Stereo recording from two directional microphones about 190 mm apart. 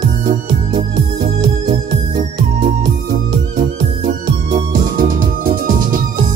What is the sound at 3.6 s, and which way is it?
Music, 40° right (ahead or behind).